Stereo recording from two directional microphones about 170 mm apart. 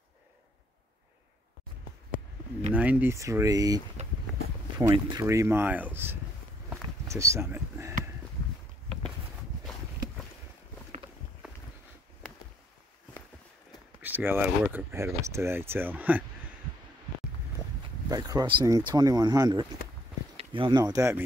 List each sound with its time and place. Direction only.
2.7 s speech: 10° right (ahead or behind)
14.0 s speech: 10° right (ahead or behind)
18.0 s speech: 20° right (ahead or behind)